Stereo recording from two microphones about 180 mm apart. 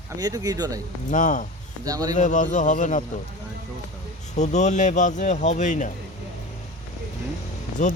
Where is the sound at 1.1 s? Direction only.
45° left (ahead or behind).